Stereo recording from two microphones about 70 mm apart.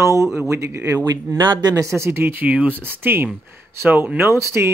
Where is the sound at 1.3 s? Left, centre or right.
Right.